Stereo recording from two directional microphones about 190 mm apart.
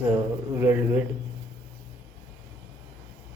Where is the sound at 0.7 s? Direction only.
10° right (ahead or behind).